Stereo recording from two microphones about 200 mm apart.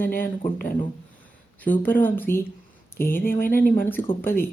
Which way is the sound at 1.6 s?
10° left (ahead or behind).